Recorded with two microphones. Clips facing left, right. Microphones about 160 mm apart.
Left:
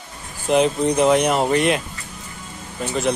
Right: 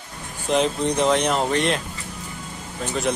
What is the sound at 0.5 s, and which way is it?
Speech, 5° left (ahead or behind).